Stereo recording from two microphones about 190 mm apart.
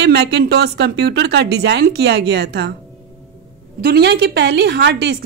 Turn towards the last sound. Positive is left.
turn(degrees=-65)  # may be behind; listen again after turning